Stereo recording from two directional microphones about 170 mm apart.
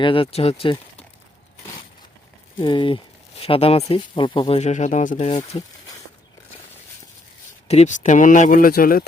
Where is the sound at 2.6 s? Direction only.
30° left (ahead or behind).